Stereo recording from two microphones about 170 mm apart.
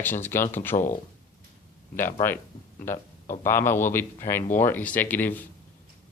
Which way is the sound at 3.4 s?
15° left (ahead or behind).